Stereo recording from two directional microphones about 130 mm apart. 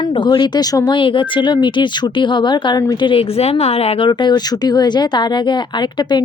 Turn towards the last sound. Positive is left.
turn(degrees=35)  # may be behind; listen again after turning